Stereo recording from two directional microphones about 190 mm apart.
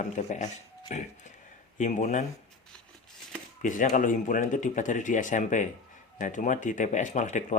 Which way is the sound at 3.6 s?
45° left (ahead or behind).